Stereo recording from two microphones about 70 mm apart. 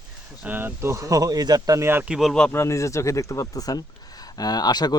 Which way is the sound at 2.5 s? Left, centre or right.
Left.